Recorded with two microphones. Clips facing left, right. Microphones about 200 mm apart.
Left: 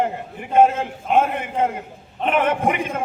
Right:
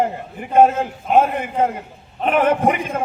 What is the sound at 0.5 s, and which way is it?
A man's voice, 40° right (ahead or behind).